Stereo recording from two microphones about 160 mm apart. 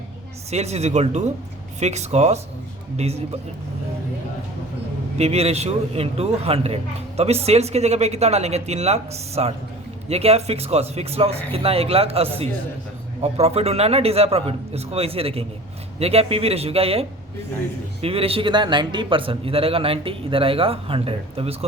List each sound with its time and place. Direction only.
0.5 s speech: 45° right (ahead or behind)
5.1 s a man's voice: 40° right (ahead or behind)